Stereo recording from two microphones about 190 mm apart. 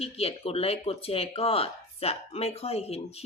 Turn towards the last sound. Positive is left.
turn(degrees=30)  # may be behind; listen again after turning